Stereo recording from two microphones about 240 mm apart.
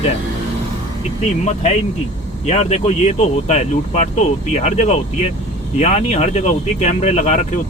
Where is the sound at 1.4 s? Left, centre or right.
Left.